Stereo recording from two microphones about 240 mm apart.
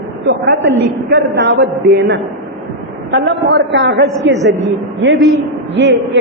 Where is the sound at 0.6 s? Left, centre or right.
Right.